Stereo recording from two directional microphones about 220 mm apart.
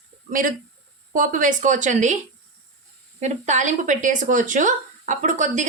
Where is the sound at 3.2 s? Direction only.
35° right (ahead or behind).